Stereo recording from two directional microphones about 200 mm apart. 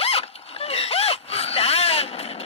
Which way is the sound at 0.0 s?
30° left (ahead or behind).